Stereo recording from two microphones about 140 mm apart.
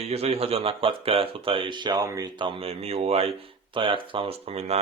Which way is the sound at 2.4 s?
40° right (ahead or behind).